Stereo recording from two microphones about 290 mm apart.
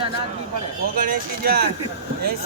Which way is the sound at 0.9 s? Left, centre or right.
Right.